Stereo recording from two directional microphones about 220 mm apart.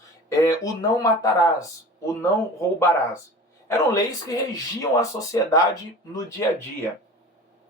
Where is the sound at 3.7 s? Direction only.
15° left (ahead or behind).